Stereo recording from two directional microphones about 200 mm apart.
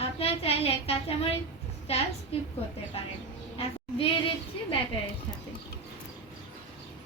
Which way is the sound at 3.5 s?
25° left (ahead or behind).